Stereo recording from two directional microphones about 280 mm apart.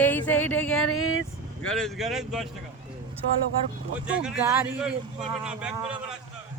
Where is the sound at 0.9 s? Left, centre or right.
Left.